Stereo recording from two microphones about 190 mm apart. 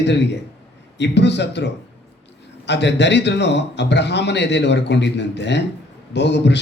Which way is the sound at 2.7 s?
65° left (ahead or behind).